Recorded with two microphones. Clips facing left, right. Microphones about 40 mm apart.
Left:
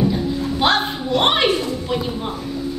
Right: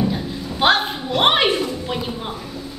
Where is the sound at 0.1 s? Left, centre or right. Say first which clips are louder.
Left 5 dB; centre.